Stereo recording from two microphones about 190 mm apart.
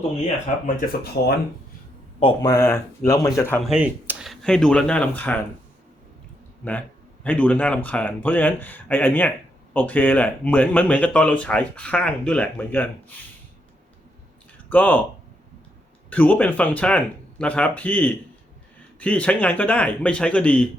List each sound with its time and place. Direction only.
0.8 s speech: 55° left (ahead or behind)
2.2 s speech: 20° left (ahead or behind)
3.7 s speech: 10° right (ahead or behind); by 5.4 s 10° left (ahead or behind)
6.6 s speech: 5° left (ahead or behind)
14.7 s speech: 10° left (ahead or behind)
16.0 s speech: 10° left (ahead or behind)